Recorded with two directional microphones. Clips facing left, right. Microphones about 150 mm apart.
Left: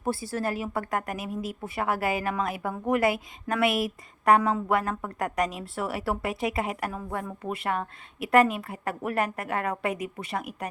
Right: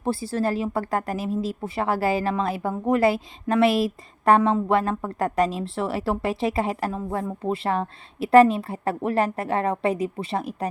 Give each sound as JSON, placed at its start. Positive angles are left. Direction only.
{"t": 0.0, "sound": "speech", "side_deg": -25}